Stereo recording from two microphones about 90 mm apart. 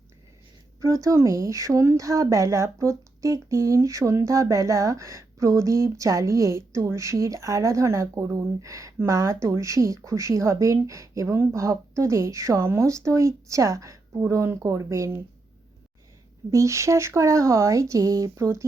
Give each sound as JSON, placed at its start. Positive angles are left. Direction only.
{"t": 0.8, "sound": "speech", "side_deg": -35}
{"t": 16.5, "sound": "speech", "side_deg": -35}